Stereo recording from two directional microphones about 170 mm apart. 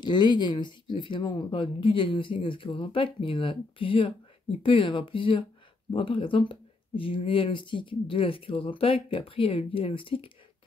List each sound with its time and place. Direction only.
0.0 s speech: 25° left (ahead or behind)